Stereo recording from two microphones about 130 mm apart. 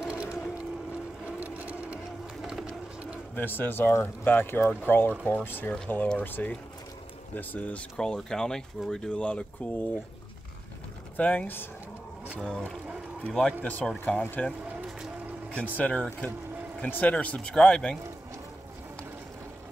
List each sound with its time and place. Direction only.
0.0 s vehicle: 5° right (ahead or behind)
1.4 s a sound: 10° right (ahead or behind)
2.4 s bird: 10° right (ahead or behind)
3.3 s speech: 15° left (ahead or behind)
11.1 s speech: 10° left (ahead or behind)
15.5 s speech: 10° left (ahead or behind)